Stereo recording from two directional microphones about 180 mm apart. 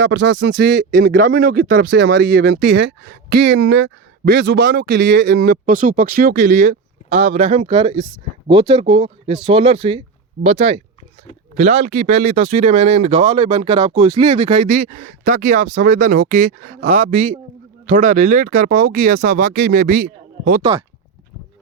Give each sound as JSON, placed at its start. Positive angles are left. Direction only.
{"t": 0.0, "sound": "speech", "side_deg": -90}
{"t": 0.9, "sound": "speech", "side_deg": -50}
{"t": 2.0, "sound": "speech", "side_deg": -75}
{"t": 3.4, "sound": "speech", "side_deg": -90}
{"t": 5.6, "sound": "speech", "side_deg": -50}
{"t": 7.1, "sound": "speech", "side_deg": -40}
{"t": 14.8, "sound": "speech", "side_deg": -50}